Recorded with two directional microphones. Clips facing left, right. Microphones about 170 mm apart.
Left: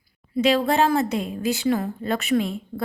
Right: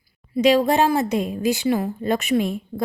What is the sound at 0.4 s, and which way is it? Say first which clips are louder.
Speech: right 3 dB; 15° right (ahead or behind).